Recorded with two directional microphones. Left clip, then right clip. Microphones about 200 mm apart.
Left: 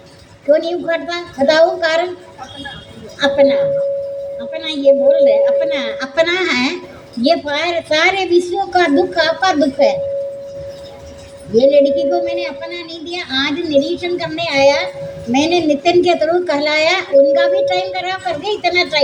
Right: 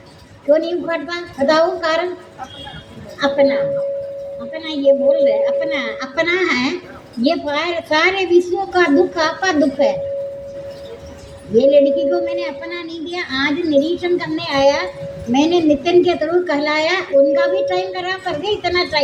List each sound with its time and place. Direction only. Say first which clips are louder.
0.5 s a woman's voice: left 2 dB; 15° left (ahead or behind)
3.2 s a woman's voice: left 3 dB; 15° left (ahead or behind)
11.5 s a woman's voice: left 1 dB; 15° left (ahead or behind)